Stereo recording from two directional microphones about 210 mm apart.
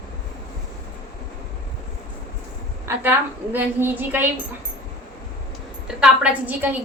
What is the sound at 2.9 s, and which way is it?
A woman's voice, 10° right (ahead or behind).